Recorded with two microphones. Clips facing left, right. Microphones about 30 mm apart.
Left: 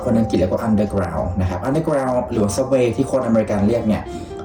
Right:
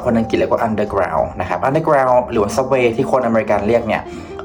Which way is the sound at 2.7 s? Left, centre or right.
Right.